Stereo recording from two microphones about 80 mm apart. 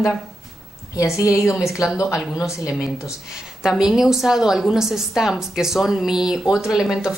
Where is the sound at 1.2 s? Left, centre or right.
Left.